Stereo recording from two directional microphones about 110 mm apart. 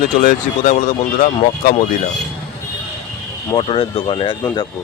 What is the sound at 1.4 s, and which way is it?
Speech, 75° left (ahead or behind).